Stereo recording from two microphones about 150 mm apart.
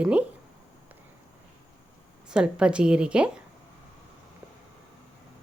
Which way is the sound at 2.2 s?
5° right (ahead or behind).